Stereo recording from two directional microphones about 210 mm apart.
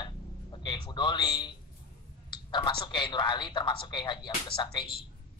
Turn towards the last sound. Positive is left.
turn(degrees=20)  # may be behind; listen again after turning